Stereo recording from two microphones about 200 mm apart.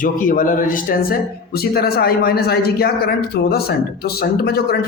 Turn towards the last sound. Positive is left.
turn(degrees=50)  # may be behind; listen again after turning